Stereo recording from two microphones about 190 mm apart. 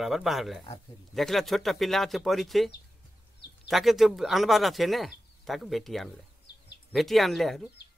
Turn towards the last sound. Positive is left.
turn(degrees=0)  # may be behind; listen again after turning